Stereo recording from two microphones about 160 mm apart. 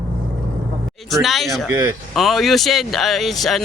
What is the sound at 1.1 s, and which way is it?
Speech, centre (ahead or behind).